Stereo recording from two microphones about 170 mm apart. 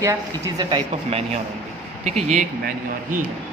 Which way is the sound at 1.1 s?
35° right (ahead or behind).